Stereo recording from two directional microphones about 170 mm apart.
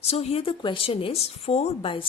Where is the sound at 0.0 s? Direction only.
35° left (ahead or behind).